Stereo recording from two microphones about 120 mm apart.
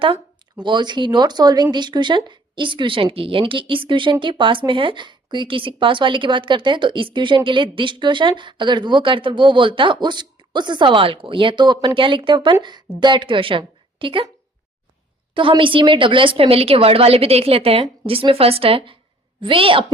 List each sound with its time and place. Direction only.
0.6 s a woman's voice: 40° right (ahead or behind)
15.4 s a woman's voice: 45° right (ahead or behind)